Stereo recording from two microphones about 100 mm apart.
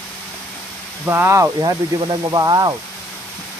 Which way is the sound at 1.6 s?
50° right (ahead or behind).